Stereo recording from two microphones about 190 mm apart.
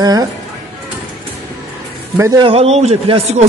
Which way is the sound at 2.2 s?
25° right (ahead or behind).